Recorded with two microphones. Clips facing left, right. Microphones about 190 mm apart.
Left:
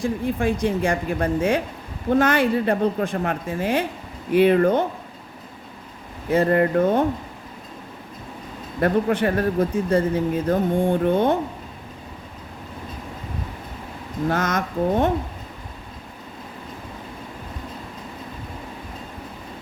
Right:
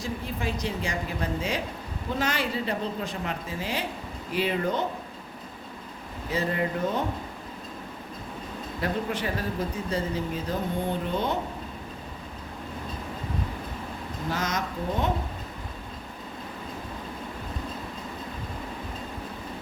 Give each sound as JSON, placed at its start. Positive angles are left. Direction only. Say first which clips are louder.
{"t": 0.0, "sound": "speech", "louder": "left 9 dB", "side_deg": 50}
{"t": 6.3, "sound": "speech", "louder": "left 10 dB", "side_deg": 60}
{"t": 8.8, "sound": "speech", "louder": "left 10 dB", "side_deg": 55}
{"t": 14.3, "sound": "speech", "louder": "left 7 dB", "side_deg": 55}